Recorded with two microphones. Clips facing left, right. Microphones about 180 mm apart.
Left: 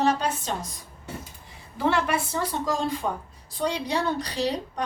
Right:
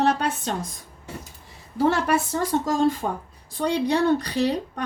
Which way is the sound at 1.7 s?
45° right (ahead or behind).